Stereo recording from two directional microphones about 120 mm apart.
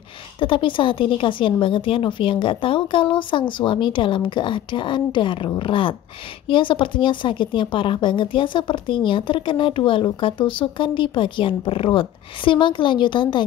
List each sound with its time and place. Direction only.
0.4 s speech: 45° left (ahead or behind)